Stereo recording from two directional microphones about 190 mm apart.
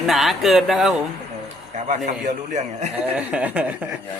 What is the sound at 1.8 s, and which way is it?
A man's voice, 40° right (ahead or behind).